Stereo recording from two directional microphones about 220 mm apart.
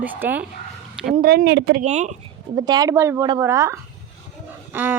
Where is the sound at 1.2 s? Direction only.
45° right (ahead or behind).